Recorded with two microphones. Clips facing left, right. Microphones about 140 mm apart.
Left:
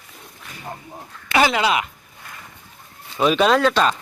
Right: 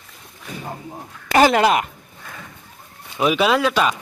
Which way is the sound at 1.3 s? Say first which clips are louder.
Right 4 dB; 45° right (ahead or behind).